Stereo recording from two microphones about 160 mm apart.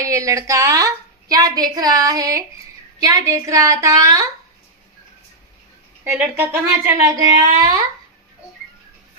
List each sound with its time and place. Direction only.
0.0 s a woman's voice: 20° right (ahead or behind)
6.1 s a woman's voice: 15° right (ahead or behind)